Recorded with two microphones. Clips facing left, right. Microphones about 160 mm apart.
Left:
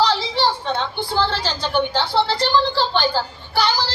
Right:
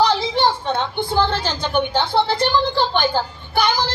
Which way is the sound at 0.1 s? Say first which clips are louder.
Right 2 dB; 20° right (ahead or behind).